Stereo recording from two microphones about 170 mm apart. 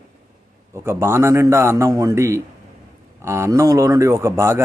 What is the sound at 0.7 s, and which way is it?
Speech, 15° right (ahead or behind).